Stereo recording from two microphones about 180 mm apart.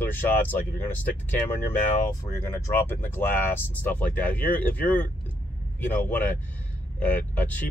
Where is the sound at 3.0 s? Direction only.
10° left (ahead or behind).